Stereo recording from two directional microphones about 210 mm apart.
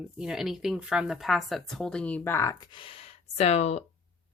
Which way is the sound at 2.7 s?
25° left (ahead or behind).